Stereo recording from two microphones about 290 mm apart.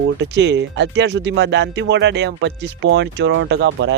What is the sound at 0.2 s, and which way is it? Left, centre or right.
Speech, right.